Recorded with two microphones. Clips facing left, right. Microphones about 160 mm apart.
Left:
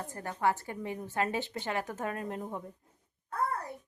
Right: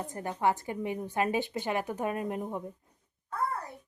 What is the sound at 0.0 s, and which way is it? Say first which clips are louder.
A woman's voice: right 2 dB; 15° right (ahead or behind).